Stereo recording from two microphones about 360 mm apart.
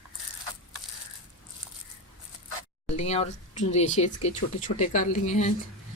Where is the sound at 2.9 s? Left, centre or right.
Centre.